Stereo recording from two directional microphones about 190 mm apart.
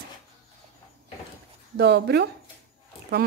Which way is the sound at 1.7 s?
60° right (ahead or behind).